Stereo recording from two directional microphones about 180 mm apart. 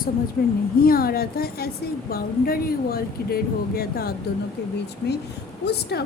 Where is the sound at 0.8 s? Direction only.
55° left (ahead or behind).